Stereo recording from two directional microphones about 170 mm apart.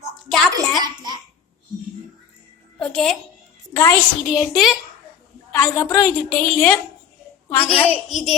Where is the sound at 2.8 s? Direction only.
5° left (ahead or behind).